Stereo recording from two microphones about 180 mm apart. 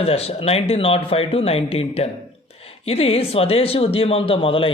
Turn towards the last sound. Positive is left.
turn(degrees=30)  # may be behind; listen again after turning